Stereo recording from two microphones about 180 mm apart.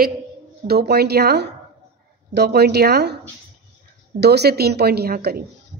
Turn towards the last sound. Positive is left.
turn(degrees=-60)  # may be behind; listen again after turning